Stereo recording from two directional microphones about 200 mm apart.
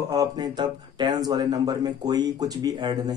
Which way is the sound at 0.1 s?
20° right (ahead or behind).